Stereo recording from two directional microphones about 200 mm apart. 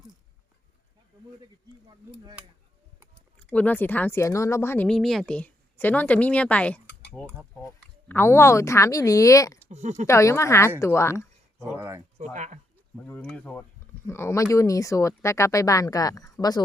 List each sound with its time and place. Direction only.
3.4 s speech: 5° left (ahead or behind)
9.6 s speech: 35° right (ahead or behind)
10.1 s speech: 15° left (ahead or behind)
11.6 s speech: 15° right (ahead or behind)
12.1 s speech: 35° right (ahead or behind)
13.1 s speech: 10° left (ahead or behind)